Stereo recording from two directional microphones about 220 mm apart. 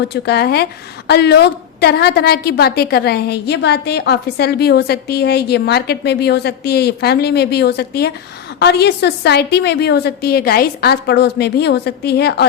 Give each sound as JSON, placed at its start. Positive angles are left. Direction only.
{"t": 0.1, "sound": "a woman's voice", "side_deg": 50}